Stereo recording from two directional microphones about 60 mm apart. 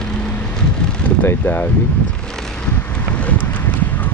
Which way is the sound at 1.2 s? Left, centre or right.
Left.